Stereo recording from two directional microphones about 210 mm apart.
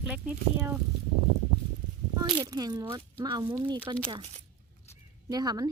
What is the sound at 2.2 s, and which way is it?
Speech, 15° right (ahead or behind).